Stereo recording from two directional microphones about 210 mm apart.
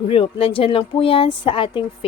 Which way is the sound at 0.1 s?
25° left (ahead or behind).